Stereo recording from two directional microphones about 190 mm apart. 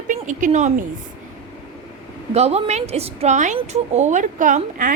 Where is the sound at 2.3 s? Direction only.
35° right (ahead or behind).